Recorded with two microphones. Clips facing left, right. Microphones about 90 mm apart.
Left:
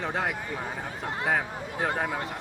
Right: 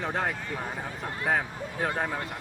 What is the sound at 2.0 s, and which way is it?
Speech, 10° left (ahead or behind).